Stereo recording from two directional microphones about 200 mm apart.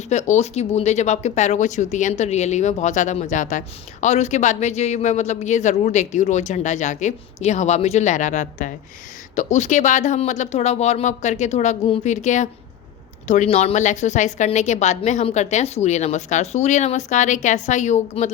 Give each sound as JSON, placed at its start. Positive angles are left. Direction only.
{"t": 0.1, "sound": "a woman's voice", "side_deg": 35}